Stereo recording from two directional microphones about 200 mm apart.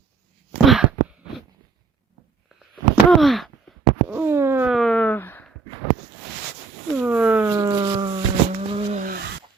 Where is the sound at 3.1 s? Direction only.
Centre (ahead or behind).